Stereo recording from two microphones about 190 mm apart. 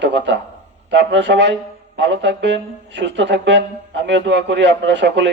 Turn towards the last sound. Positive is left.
turn(degrees=-70)  # may be behind; listen again after turning